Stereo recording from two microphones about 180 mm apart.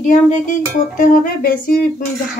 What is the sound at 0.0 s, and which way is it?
Music, 45° left (ahead or behind).